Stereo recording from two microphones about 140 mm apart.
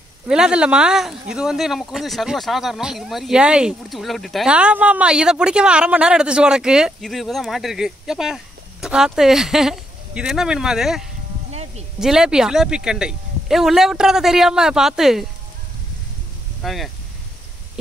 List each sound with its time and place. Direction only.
0.3 s speech: 5° right (ahead or behind)
11.5 s a sound: 50° right (ahead or behind)
12.0 s speech: 5° right (ahead or behind)
16.6 s speech: centre (ahead or behind)